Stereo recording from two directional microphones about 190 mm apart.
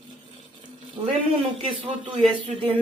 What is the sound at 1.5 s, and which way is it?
Speech, 25° right (ahead or behind).